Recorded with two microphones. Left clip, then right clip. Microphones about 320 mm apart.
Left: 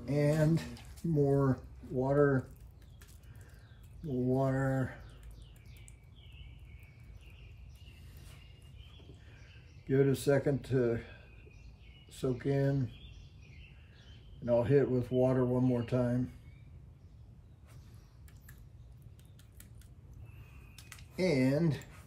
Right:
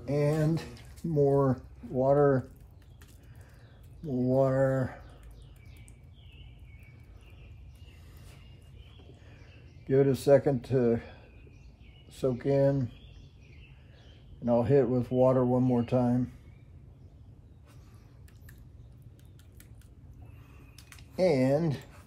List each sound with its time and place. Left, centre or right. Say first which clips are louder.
0.1 s speech: right 2 dB; centre
4.4 s speech: right 7 dB; right
9.8 s speech: right 6 dB; centre
14.4 s speech: right 3 dB; centre
21.2 s speech: right 5 dB; centre